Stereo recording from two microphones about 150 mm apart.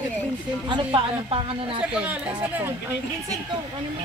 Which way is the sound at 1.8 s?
10° right (ahead or behind).